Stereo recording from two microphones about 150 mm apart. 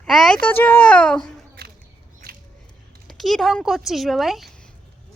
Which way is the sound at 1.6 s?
90° right.